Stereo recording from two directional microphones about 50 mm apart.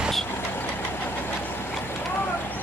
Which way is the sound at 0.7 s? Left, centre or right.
Left.